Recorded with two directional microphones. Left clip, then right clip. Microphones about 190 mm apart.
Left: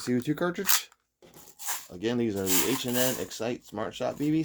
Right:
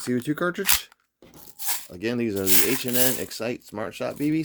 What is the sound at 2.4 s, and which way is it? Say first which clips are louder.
Rub: right 4 dB; 65° right (ahead or behind).